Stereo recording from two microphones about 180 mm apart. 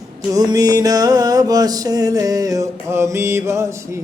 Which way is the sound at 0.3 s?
20° right (ahead or behind).